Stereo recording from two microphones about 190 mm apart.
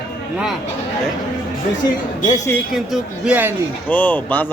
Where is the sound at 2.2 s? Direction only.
20° left (ahead or behind).